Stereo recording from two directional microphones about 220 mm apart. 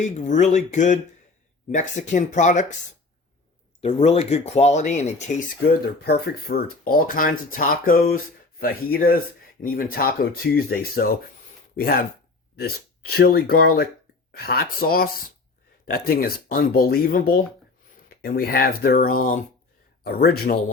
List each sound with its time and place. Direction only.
0.0 s speech: 35° left (ahead or behind)
3.8 s speech: 30° left (ahead or behind); by 20.6 s 45° left (ahead or behind)